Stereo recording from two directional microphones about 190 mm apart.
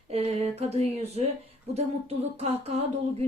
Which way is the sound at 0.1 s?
35° right (ahead or behind).